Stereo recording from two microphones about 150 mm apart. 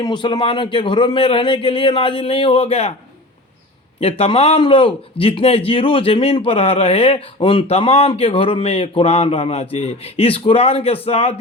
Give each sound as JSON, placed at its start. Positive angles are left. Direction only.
{"t": 0.0, "sound": "a man's voice", "side_deg": 30}
{"t": 4.0, "sound": "a man's voice", "side_deg": 40}